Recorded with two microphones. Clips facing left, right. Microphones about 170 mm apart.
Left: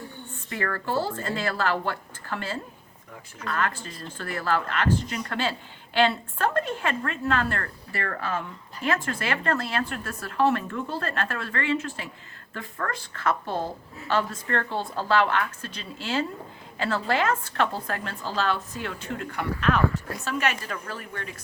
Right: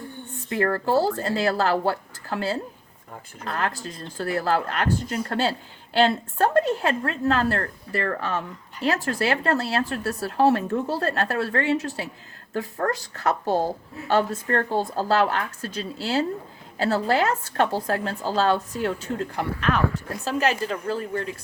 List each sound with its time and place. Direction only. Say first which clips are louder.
0.6 s a woman's voice: right 6 dB; 40° right (ahead or behind)